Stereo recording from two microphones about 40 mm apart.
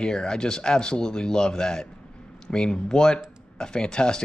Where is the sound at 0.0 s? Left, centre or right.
Centre.